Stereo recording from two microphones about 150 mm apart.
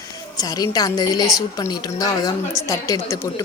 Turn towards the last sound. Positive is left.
turn(degrees=20)  # may be behind; listen again after turning